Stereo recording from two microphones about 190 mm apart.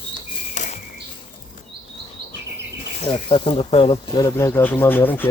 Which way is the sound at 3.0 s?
30° left (ahead or behind).